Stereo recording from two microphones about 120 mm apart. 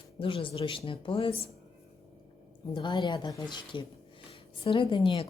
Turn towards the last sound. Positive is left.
turn(degrees=45)  # may be behind; listen again after turning